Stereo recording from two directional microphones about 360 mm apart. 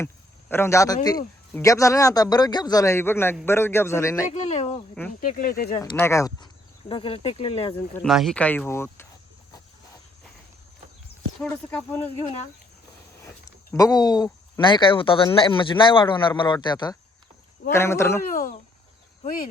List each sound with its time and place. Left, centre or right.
0.0 s speech: centre; by 5.8 s left
5.8 s speech: centre
7.9 s speech: centre
11.3 s speech: centre
13.7 s speech: centre
18.3 s speech: left